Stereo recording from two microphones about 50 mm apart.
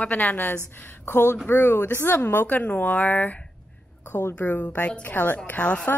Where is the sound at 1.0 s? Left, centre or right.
Left.